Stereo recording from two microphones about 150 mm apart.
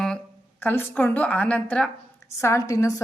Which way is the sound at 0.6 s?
15° left (ahead or behind).